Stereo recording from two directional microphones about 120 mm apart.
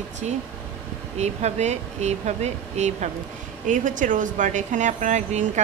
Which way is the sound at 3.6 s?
90° right.